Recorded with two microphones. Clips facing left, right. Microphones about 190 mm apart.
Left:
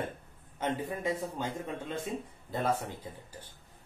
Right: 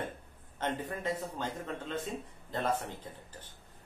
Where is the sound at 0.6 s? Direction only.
10° left (ahead or behind).